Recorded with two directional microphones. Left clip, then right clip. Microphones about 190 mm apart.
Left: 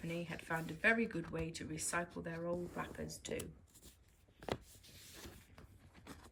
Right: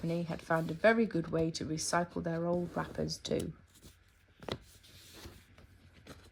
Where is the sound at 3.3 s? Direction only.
25° left (ahead or behind).